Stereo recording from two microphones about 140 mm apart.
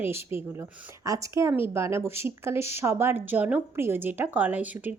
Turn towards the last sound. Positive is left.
turn(degrees=-10)  # may be behind; listen again after turning